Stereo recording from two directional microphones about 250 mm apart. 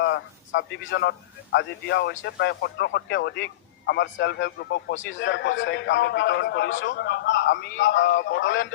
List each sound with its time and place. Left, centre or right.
0.0 s a man's voice: left